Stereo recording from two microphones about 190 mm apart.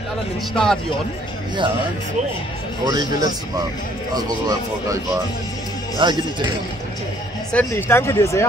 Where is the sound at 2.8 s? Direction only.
20° right (ahead or behind).